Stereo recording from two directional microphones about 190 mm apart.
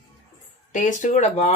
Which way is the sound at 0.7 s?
40° left (ahead or behind).